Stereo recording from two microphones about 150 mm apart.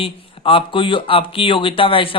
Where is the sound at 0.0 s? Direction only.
35° left (ahead or behind).